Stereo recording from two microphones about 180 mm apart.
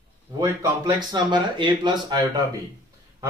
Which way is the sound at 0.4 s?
20° right (ahead or behind).